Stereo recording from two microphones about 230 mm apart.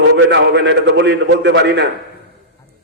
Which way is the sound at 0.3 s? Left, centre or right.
Right.